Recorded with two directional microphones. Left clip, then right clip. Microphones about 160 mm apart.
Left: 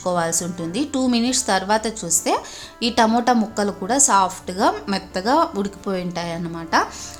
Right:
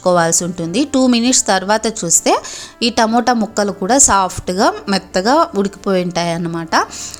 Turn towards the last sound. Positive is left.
turn(degrees=-45)  # may be behind; listen again after turning